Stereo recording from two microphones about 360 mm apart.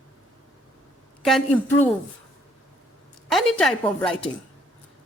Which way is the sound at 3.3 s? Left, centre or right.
Centre.